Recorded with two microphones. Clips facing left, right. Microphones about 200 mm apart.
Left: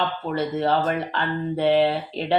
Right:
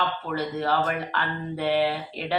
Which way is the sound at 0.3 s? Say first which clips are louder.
Left 5 dB; 25° left (ahead or behind).